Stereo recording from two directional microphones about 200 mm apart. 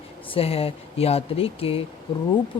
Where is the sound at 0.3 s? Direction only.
30° left (ahead or behind).